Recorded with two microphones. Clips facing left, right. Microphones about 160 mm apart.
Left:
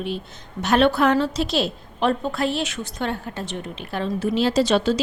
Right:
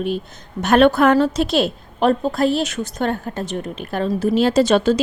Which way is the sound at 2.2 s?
40° right (ahead or behind).